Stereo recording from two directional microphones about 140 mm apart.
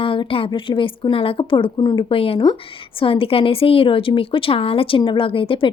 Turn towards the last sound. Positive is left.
turn(degrees=40)  # may be behind; listen again after turning